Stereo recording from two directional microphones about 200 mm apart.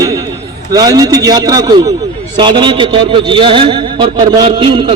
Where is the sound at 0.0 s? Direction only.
15° right (ahead or behind).